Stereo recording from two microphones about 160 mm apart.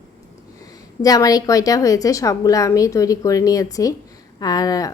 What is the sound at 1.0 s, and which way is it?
Speech, 25° left (ahead or behind).